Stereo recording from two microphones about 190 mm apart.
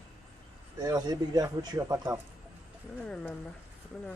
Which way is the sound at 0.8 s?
20° right (ahead or behind).